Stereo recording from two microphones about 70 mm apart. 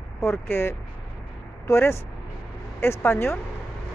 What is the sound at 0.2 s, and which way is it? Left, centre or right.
Speech, left.